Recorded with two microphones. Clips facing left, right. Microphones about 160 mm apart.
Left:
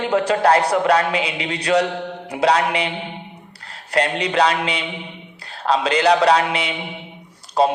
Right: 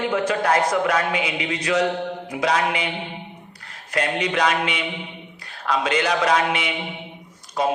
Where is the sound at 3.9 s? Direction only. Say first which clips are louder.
Left 4 dB; 35° left (ahead or behind).